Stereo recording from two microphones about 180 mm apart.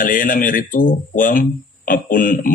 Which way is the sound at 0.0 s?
50° left (ahead or behind).